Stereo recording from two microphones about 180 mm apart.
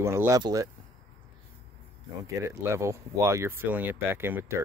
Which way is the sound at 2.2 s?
15° right (ahead or behind).